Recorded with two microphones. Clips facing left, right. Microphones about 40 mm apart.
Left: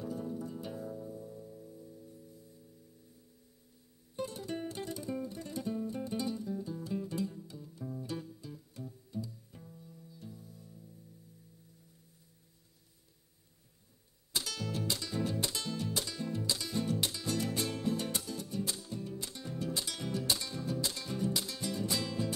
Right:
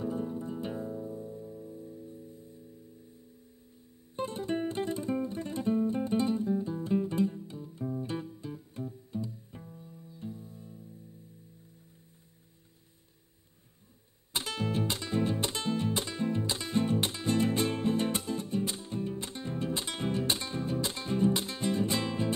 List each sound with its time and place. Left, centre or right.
0.0 s music: right
4.2 s music: right
14.3 s music: right